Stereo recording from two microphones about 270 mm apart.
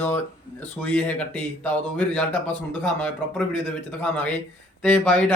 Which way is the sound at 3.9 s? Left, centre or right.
Centre.